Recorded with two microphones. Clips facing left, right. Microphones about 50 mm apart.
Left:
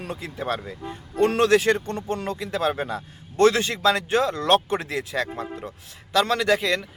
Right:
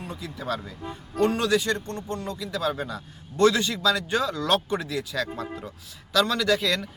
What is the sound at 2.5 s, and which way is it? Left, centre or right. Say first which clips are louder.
A man's voice: left 3 dB; left.